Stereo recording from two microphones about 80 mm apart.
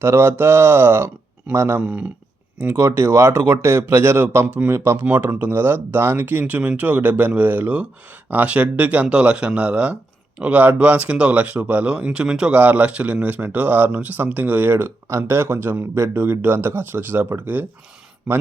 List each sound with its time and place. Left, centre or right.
0.0 s a man's voice: right
1.8 s speech: centre
2.6 s a man's voice: right